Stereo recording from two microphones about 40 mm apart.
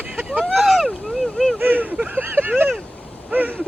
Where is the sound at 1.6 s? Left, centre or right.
Right.